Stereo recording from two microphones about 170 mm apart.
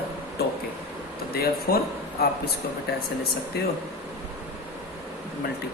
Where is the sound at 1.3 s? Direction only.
65° left (ahead or behind).